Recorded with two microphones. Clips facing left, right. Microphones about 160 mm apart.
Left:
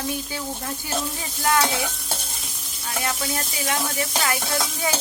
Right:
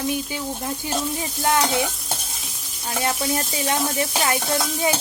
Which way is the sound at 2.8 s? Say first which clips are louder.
Right 4 dB; 30° right (ahead or behind).